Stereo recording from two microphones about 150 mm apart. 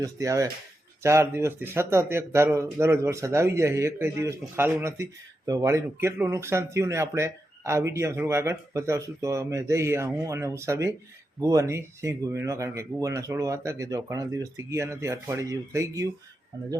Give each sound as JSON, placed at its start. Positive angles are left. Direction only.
{"t": 0.0, "sound": "speech", "side_deg": -20}